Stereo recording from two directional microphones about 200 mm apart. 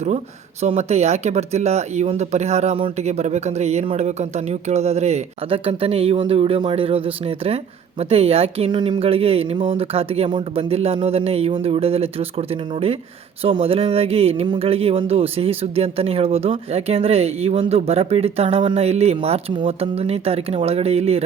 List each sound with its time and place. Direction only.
0.6 s speech: 30° right (ahead or behind)